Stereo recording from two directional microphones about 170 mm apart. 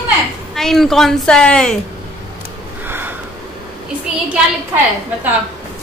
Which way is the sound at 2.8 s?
10° right (ahead or behind).